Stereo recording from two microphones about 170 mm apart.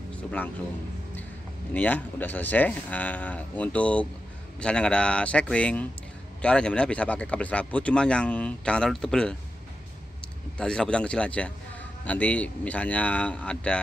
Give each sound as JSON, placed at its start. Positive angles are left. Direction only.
{"t": 0.1, "sound": "a man's voice", "side_deg": 5}
{"t": 1.7, "sound": "speech", "side_deg": 10}
{"t": 10.6, "sound": "a man's voice", "side_deg": 5}